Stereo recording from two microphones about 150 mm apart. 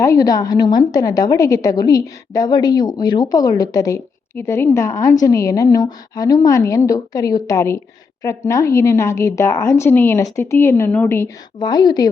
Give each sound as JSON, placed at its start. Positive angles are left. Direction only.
{"t": 0.0, "sound": "a woman's voice", "side_deg": 20}
{"t": 11.6, "sound": "a woman's voice", "side_deg": 30}